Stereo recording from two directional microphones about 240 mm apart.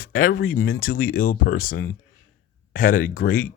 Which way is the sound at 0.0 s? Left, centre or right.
Left.